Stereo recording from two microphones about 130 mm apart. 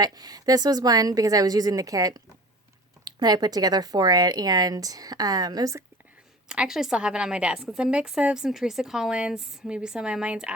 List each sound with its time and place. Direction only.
0.0 s speech: 30° right (ahead or behind)
6.5 s a woman's voice: 5° right (ahead or behind)